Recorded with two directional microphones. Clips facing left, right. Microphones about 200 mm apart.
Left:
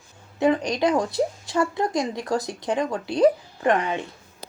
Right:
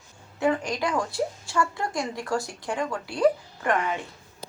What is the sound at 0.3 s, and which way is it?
A woman's voice, 20° left (ahead or behind).